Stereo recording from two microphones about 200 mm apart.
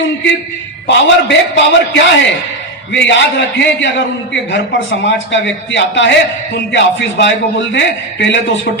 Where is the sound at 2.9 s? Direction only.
65° left (ahead or behind).